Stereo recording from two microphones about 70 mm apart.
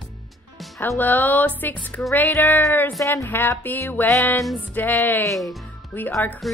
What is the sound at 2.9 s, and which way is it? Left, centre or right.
Speech, left.